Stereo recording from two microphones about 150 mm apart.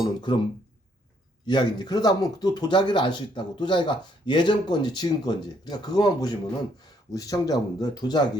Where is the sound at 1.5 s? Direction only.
30° left (ahead or behind).